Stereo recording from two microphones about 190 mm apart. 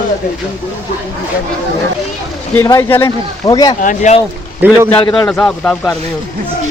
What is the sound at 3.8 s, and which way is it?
Speech, 40° left (ahead or behind).